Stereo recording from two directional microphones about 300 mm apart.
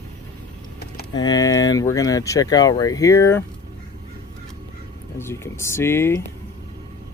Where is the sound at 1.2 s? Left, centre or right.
Centre.